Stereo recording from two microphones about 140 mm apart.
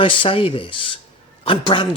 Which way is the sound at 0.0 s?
40° left (ahead or behind).